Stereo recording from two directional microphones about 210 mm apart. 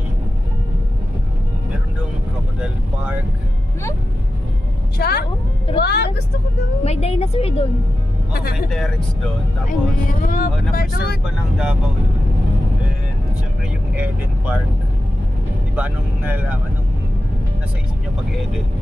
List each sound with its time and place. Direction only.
4.9 s a woman's voice: 50° left (ahead or behind)
6.8 s a woman's voice: 30° left (ahead or behind)
8.3 s speech: 50° left (ahead or behind)
8.6 s speech: centre (ahead or behind)
9.7 s a woman's voice: 40° left (ahead or behind)
11.5 s speech: 5° right (ahead or behind)
13.9 s speech: 5° right (ahead or behind)
15.7 s speech: 5° right (ahead or behind)